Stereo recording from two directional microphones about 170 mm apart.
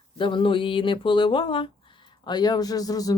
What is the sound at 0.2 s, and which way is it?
Speech, 30° left (ahead or behind).